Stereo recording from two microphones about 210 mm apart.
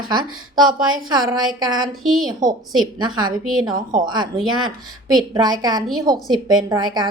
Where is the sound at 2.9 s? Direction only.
20° right (ahead or behind).